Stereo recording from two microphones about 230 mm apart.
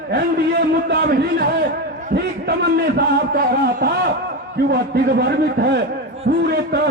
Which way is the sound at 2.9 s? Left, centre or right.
Right.